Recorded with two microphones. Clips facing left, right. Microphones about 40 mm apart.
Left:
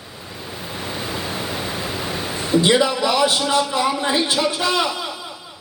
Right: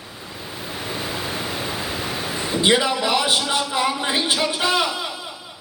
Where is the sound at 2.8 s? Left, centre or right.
Centre.